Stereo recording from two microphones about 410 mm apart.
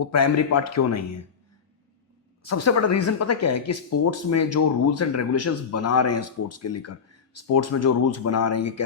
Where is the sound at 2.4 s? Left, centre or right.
Left.